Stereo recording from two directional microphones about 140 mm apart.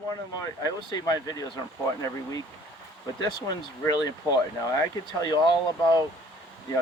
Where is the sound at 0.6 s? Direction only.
30° left (ahead or behind).